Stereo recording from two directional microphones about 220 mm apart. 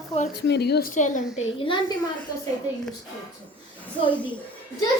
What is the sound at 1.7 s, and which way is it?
Speech, 20° left (ahead or behind).